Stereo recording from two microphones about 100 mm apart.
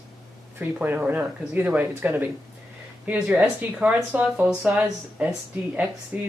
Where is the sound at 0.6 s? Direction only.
20° right (ahead or behind).